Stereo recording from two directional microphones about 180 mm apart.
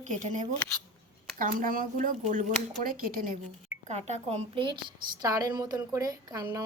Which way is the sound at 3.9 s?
40° right (ahead or behind).